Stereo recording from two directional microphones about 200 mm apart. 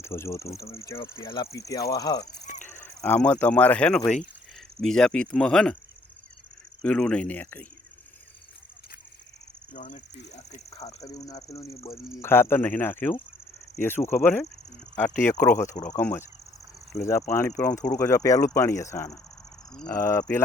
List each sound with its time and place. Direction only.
0.0 s speech: 15° left (ahead or behind)
6.8 s speech: 5° left (ahead or behind)
9.7 s speech: 40° left (ahead or behind)
10.8 s speech: 20° left (ahead or behind)